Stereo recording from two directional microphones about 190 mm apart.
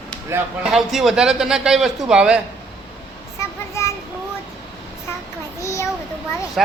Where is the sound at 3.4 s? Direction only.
15° left (ahead or behind).